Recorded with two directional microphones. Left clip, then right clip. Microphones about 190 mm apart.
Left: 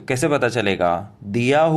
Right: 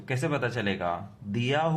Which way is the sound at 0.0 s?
40° left (ahead or behind).